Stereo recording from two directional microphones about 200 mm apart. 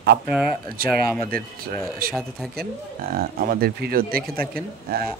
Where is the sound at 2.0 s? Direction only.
45° right (ahead or behind).